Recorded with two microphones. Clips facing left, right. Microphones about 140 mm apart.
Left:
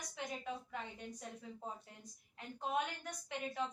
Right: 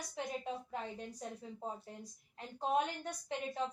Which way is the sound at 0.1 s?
35° right (ahead or behind).